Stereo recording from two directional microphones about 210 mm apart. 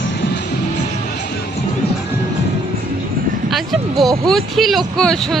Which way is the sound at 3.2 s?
45° right (ahead or behind).